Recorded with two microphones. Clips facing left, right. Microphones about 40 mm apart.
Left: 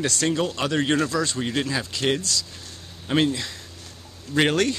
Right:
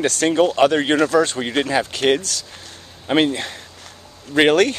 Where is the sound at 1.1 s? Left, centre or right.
Right.